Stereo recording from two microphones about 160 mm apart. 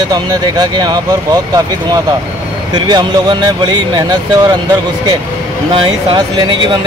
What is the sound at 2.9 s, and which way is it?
Speech, 25° right (ahead or behind).